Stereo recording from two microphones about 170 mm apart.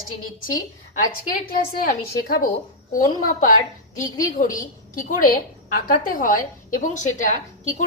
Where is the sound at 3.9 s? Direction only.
50° left (ahead or behind).